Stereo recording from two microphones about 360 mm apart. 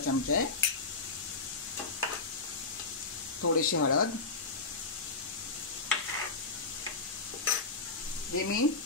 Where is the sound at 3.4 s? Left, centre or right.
Left.